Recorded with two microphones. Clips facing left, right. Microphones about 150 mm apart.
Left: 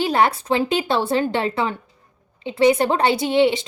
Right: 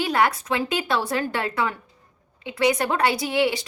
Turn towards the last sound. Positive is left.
turn(degrees=25)  # may be behind; listen again after turning